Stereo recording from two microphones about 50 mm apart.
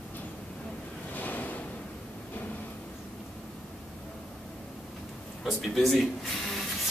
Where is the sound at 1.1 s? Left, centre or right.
Left.